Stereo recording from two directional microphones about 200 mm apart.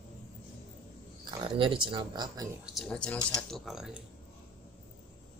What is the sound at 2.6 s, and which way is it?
Speech, centre (ahead or behind).